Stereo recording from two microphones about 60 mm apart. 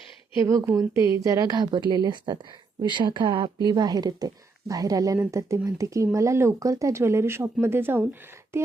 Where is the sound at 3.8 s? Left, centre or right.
Right.